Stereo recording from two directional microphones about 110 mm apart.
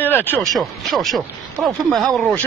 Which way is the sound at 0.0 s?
15° left (ahead or behind).